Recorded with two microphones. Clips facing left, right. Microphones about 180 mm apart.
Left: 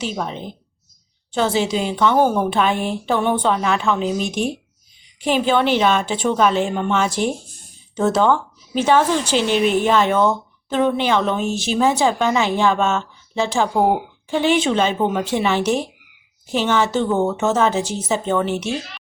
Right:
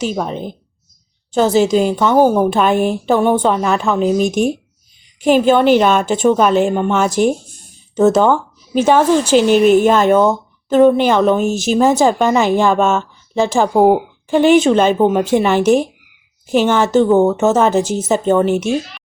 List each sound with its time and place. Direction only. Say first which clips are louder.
0.0 s a woman's voice: right 6 dB; 45° right (ahead or behind)